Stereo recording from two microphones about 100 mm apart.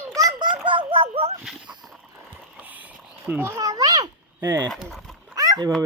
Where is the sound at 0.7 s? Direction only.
60° right (ahead or behind); by 1.3 s 90° right.